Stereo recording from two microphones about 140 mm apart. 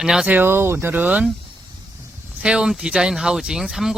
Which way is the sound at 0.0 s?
5° right (ahead or behind).